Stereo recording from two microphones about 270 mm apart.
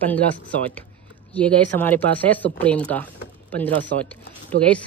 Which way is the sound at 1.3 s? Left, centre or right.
Centre.